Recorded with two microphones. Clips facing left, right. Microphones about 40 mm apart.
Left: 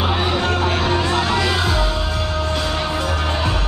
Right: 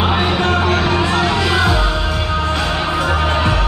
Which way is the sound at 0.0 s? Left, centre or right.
Right.